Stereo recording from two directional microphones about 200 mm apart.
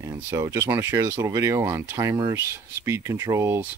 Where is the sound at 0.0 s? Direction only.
15° right (ahead or behind).